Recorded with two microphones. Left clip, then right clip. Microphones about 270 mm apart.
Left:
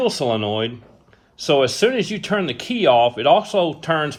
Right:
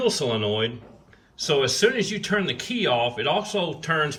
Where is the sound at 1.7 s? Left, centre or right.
Centre.